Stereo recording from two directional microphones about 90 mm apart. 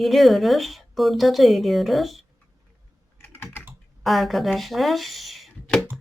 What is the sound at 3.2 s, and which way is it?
Typing, 25° left (ahead or behind).